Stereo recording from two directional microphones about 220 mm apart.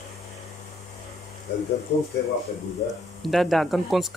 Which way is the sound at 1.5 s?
50° left (ahead or behind).